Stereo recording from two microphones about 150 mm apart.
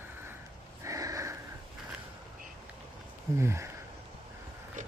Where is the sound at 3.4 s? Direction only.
20° right (ahead or behind).